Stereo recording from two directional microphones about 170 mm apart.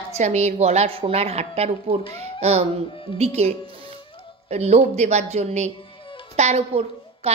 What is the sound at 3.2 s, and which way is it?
Speech, 40° right (ahead or behind).